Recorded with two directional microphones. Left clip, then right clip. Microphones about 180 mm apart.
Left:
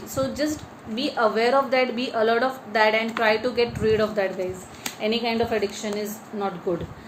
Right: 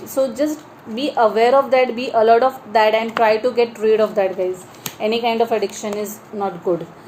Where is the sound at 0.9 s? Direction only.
30° right (ahead or behind).